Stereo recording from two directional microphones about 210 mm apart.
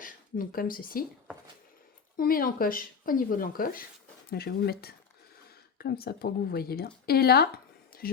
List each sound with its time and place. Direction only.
0.0 s speech: 40° left (ahead or behind)
2.1 s speech: 45° left (ahead or behind)